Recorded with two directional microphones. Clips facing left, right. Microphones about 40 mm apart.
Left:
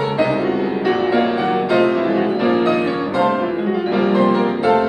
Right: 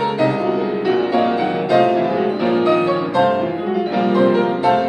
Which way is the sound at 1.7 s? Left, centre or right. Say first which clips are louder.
Right 2 dB; left.